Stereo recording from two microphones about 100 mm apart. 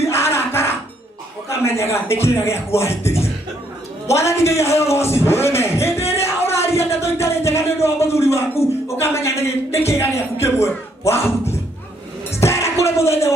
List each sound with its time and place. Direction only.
0.0 s music: 25° left (ahead or behind)
1.5 s speech: 25° left (ahead or behind)
6.2 s a sound: 25° left (ahead or behind)
12.3 s music: 25° left (ahead or behind)